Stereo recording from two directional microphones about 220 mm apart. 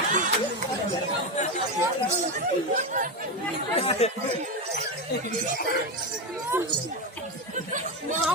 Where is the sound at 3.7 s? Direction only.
30° left (ahead or behind).